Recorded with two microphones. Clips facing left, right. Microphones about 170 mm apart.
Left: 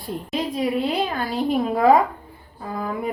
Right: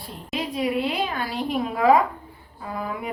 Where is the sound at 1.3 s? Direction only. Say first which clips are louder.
Left 5 dB; 35° left (ahead or behind).